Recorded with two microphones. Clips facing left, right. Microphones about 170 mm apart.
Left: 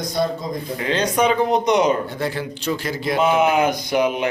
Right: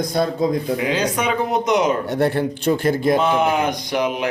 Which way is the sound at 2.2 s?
55° right (ahead or behind).